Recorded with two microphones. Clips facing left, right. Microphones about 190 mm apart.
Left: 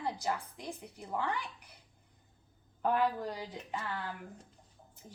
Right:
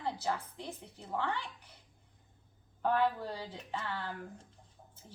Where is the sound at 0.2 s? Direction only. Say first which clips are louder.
Even; 15° left (ahead or behind).